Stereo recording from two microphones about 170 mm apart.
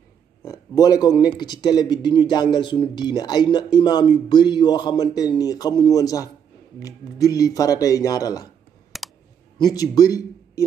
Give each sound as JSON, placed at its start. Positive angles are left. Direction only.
{"t": 0.4, "sound": "speech", "side_deg": 20}
{"t": 8.9, "sound": "clicking", "side_deg": 0}
{"t": 9.6, "sound": "speech", "side_deg": 20}